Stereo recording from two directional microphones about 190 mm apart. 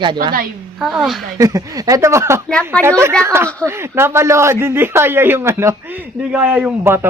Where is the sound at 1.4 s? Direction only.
15° right (ahead or behind).